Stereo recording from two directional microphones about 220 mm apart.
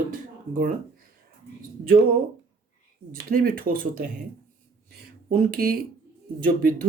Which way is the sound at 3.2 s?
40° right (ahead or behind).